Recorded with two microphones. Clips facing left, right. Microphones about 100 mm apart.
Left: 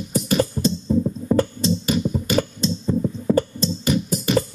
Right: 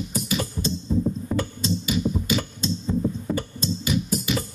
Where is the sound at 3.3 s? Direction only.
50° left (ahead or behind).